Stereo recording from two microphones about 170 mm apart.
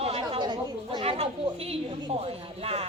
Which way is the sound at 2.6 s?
35° right (ahead or behind).